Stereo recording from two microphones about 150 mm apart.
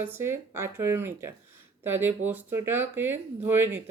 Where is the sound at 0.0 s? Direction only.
15° right (ahead or behind).